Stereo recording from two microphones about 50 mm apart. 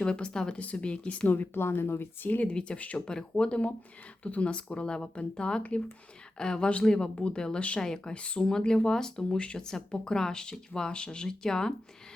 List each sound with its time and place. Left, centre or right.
0.0 s speech: centre
1.5 s speech: left
2.4 s speech: left
3.1 s speech: centre